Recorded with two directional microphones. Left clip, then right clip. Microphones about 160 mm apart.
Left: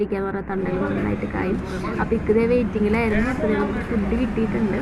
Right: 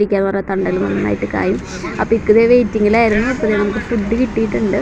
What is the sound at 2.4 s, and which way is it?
Speech, 30° right (ahead or behind).